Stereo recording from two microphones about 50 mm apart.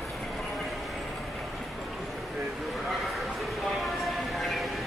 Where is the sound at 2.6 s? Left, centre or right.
Centre.